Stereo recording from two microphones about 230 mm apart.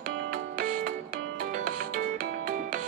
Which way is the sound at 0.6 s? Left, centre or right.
Right.